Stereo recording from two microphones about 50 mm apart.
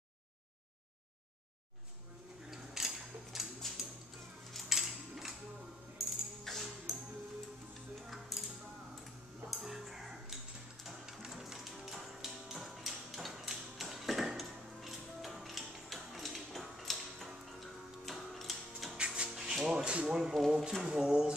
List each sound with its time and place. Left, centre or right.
2.5 s a sound: centre
6.4 s music: centre
8.0 s music: centre
9.5 s music: centre
18.9 s music: centre
19.3 s rub: centre
19.7 s a sound: centre
20.3 s a sound: centre
20.8 s speech: centre